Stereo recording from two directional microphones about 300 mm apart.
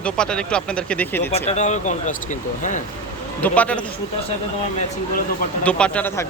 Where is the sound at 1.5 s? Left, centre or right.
Left.